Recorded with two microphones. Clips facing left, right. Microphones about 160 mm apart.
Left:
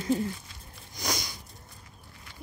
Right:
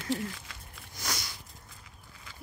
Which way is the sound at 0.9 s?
15° left (ahead or behind).